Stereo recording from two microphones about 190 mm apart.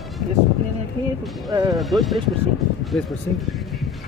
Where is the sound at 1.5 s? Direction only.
20° right (ahead or behind).